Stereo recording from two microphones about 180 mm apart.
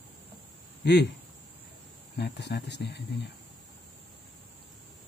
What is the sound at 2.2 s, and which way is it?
Speech, 65° left (ahead or behind).